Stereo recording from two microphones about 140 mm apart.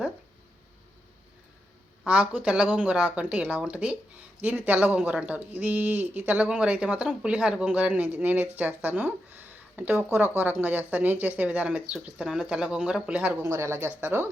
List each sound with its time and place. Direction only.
2.0 s speech: 10° right (ahead or behind)
13.4 s speech: 20° right (ahead or behind)